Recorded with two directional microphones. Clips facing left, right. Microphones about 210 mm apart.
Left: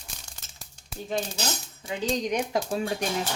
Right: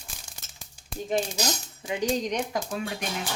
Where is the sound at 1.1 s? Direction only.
15° right (ahead or behind).